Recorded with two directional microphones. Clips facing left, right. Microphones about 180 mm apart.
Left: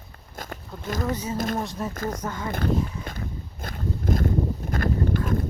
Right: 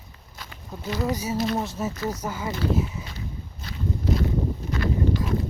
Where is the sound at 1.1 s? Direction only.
10° right (ahead or behind).